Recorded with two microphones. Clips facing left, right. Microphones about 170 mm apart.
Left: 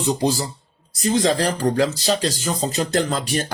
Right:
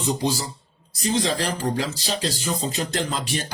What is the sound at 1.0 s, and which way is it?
Speech, 45° left (ahead or behind).